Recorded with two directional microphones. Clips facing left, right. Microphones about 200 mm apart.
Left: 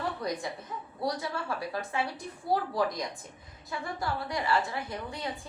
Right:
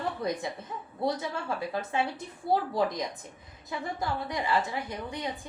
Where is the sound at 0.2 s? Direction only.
25° right (ahead or behind).